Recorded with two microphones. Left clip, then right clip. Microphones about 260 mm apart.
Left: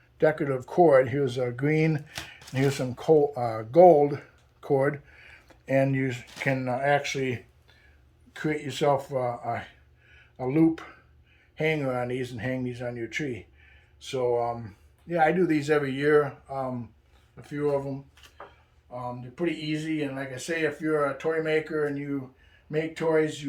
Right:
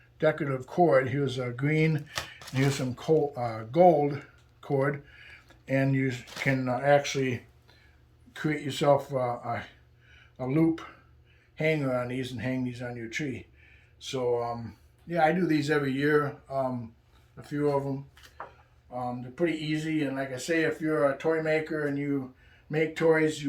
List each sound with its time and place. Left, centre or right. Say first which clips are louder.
0.2 s speech: left 3 dB; centre
8.4 s speech: left 2 dB; centre
22.7 s speech: right 1 dB; centre